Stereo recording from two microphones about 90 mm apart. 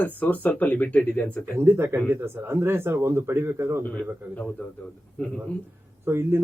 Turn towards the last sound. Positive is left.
turn(degrees=-25)  # may be behind; listen again after turning